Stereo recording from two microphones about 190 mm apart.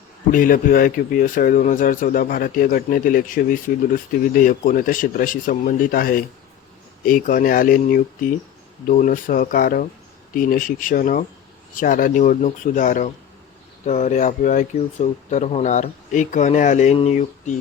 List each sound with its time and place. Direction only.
0.3 s speech: 45° left (ahead or behind)